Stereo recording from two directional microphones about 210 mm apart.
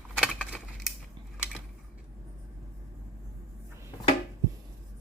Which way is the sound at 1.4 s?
5° right (ahead or behind).